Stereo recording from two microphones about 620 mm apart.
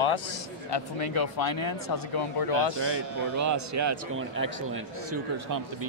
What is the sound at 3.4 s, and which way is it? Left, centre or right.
A man's voice, right.